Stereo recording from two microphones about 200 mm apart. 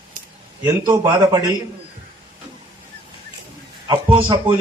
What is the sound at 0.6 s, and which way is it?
Speech, 15° right (ahead or behind).